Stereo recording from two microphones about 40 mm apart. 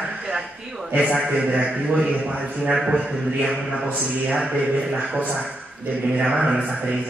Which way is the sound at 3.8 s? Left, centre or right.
Right.